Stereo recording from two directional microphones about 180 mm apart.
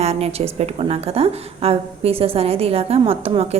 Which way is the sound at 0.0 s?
35° right (ahead or behind).